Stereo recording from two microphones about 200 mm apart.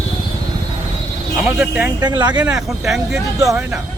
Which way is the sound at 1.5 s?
10° right (ahead or behind).